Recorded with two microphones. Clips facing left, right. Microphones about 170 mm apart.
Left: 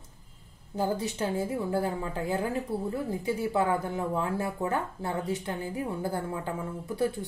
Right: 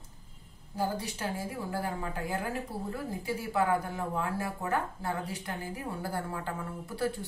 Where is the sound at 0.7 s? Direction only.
20° left (ahead or behind).